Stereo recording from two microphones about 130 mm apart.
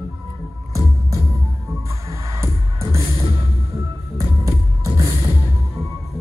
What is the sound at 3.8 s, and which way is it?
Music, 25° right (ahead or behind).